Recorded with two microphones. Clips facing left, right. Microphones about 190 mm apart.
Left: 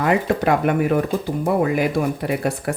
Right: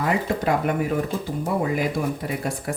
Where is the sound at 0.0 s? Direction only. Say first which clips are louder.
Left 4 dB; 70° left (ahead or behind).